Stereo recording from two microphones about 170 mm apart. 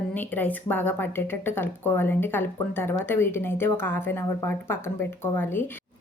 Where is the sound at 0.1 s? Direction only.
10° left (ahead or behind).